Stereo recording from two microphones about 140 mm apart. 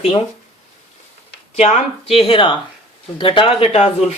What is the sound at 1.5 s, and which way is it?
Speech, 50° left (ahead or behind).